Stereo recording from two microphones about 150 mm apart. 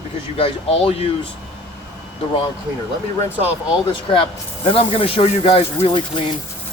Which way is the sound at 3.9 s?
35° left (ahead or behind).